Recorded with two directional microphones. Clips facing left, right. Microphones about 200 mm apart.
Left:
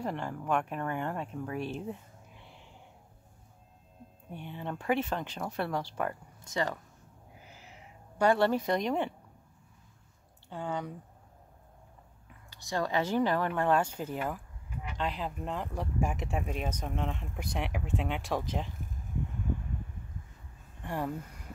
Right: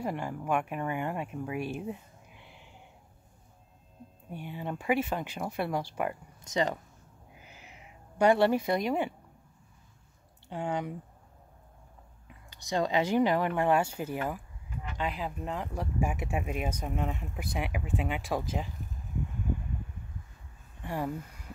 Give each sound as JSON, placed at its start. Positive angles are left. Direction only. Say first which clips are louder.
{"t": 0.0, "sound": "speech", "louder": "right 1 dB", "side_deg": -10}
{"t": 4.3, "sound": "speech", "louder": "right 2 dB", "side_deg": -10}
{"t": 7.3, "sound": "cat", "louder": "even", "side_deg": -20}
{"t": 10.5, "sound": "speech", "louder": "right 3 dB", "side_deg": -15}
{"t": 12.4, "sound": "speech", "louder": "right 3 dB", "side_deg": -20}
{"t": 20.8, "sound": "speech", "louder": "right 1 dB", "side_deg": -5}